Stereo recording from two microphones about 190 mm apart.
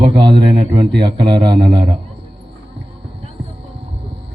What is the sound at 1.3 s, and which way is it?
Speech, 25° right (ahead or behind).